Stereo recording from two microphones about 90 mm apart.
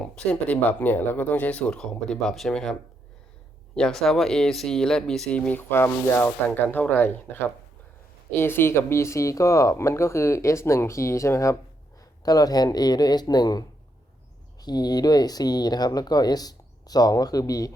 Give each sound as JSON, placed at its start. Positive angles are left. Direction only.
{"t": 0.0, "sound": "speech", "side_deg": 10}
{"t": 3.8, "sound": "speech", "side_deg": 5}
{"t": 5.5, "sound": "speech", "side_deg": 20}
{"t": 12.2, "sound": "speech", "side_deg": 45}